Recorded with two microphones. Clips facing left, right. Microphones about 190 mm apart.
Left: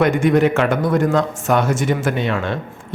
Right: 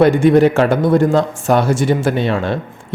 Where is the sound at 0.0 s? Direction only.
30° right (ahead or behind).